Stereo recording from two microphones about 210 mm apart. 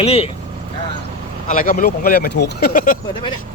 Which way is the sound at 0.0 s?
30° left (ahead or behind).